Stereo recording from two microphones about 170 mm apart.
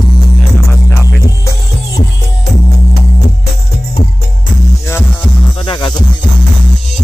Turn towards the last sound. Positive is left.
turn(degrees=25)  # may be behind; listen again after turning